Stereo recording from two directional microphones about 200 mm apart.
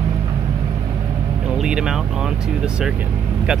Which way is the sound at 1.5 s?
5° right (ahead or behind).